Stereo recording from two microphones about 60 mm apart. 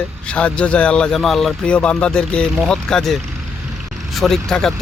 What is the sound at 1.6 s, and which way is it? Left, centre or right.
Speech, centre.